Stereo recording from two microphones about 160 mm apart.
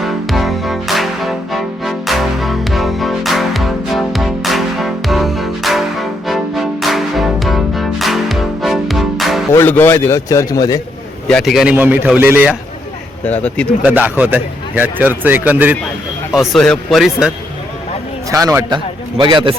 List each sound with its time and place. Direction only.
0.0 s music: centre (ahead or behind)
9.5 s a man's voice: 15° left (ahead or behind)
11.3 s a man's voice: centre (ahead or behind)
13.2 s a man's voice: 10° left (ahead or behind)
13.8 s a man's voice: 10° right (ahead or behind)
16.4 s speech: centre (ahead or behind)
18.3 s a man's voice: 20° right (ahead or behind)